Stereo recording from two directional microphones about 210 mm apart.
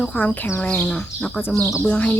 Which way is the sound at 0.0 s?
5° left (ahead or behind).